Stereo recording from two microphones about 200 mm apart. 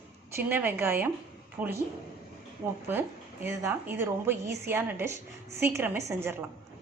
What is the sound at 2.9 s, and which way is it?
A woman's voice, 10° right (ahead or behind).